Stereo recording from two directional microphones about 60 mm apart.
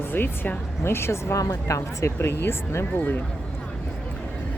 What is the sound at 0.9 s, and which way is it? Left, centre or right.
Speech, left.